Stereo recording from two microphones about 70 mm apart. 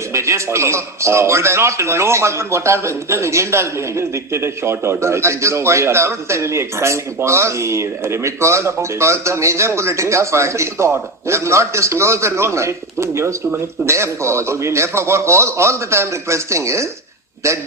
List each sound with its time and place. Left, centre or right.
0.1 s a man's voice: right